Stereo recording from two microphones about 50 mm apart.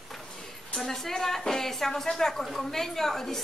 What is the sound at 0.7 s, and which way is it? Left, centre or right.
A woman's voice, centre.